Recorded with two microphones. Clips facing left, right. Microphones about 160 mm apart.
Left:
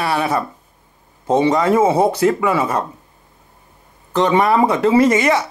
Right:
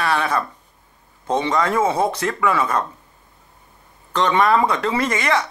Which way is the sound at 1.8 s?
10° left (ahead or behind).